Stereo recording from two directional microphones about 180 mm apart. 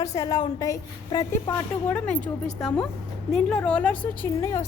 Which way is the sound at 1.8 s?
5° left (ahead or behind).